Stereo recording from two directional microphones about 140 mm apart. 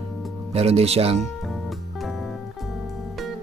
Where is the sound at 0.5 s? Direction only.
50° right (ahead or behind).